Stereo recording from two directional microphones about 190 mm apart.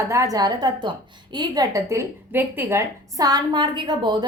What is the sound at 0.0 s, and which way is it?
A woman's voice, 15° right (ahead or behind).